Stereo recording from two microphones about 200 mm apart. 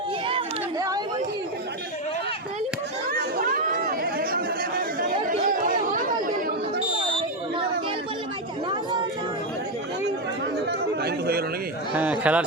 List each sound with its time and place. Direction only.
0.3 s chatter: 20° right (ahead or behind)
3.1 s chatter: 45° right (ahead or behind)
10.7 s chatter: 50° right (ahead or behind)
12.2 s a man's voice: 5° right (ahead or behind)